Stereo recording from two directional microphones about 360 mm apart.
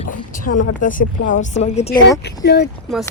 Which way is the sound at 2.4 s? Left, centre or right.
Left.